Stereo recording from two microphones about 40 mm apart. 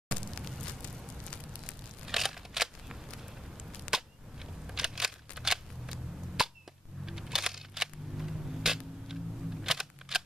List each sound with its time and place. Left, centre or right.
0.8 s fire: left
2.0 s scissors: centre
3.9 s a sound: centre
4.6 s scissors: centre
6.4 s arrow: centre
7.1 s a sound: centre